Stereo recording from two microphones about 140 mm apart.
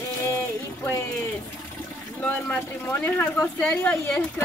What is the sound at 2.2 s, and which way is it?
Speech, 10° left (ahead or behind).